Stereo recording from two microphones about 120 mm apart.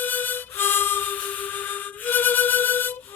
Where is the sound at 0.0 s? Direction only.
15° left (ahead or behind).